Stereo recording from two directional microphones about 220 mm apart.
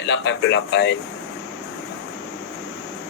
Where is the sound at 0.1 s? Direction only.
55° left (ahead or behind).